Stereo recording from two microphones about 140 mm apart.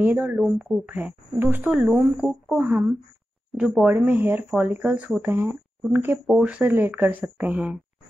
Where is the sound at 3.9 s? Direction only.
15° right (ahead or behind).